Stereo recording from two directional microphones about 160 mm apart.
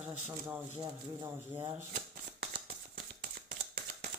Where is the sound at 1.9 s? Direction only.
60° right (ahead or behind).